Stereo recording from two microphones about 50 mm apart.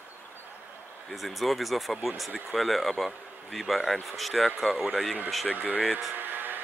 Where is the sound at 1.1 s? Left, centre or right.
Centre.